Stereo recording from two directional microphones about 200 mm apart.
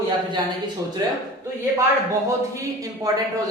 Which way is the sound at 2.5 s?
15° right (ahead or behind).